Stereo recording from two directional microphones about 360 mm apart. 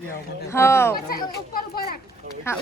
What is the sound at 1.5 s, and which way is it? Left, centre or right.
Children playing, left.